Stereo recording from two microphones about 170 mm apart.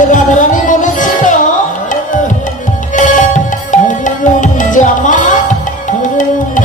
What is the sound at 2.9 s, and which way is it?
Music, 50° left (ahead or behind).